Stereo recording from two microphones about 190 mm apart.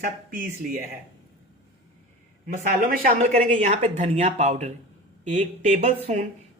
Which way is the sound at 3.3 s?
35° right (ahead or behind).